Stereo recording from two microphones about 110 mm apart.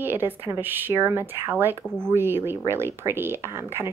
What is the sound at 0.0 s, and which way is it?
Speech, 20° right (ahead or behind).